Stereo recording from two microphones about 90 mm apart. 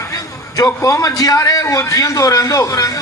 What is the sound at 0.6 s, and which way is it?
A man's voice, 40° left (ahead or behind).